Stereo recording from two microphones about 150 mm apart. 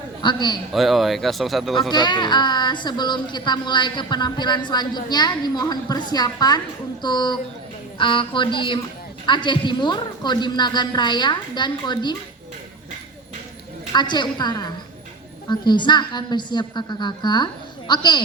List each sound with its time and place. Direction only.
0.2 s a woman's voice: 30° left (ahead or behind)
0.7 s speech: centre (ahead or behind)
1.9 s a woman's voice: 30° left (ahead or behind)
13.9 s a woman's voice: 30° left (ahead or behind)